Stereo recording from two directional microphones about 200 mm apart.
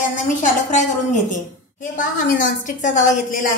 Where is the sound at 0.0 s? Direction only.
40° left (ahead or behind).